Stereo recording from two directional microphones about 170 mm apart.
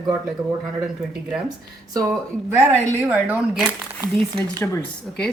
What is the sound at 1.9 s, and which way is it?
Speech, 20° right (ahead or behind).